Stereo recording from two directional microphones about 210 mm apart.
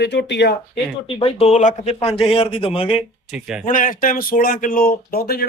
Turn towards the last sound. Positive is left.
turn(degrees=45)  # may be behind; listen again after turning